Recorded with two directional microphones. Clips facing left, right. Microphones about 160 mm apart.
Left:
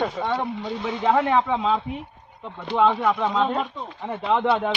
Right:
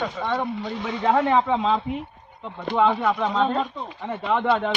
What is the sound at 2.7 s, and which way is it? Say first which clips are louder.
Speech: right 1 dB; 45° right (ahead or behind).